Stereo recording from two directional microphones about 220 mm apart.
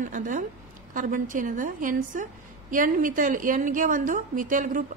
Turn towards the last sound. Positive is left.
turn(degrees=-35)  # may be behind; listen again after turning